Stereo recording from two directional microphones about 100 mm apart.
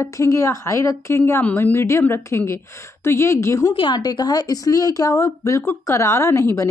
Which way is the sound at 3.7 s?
50° left (ahead or behind).